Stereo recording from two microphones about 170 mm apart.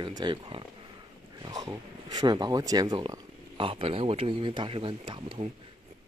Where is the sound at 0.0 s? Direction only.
25° right (ahead or behind).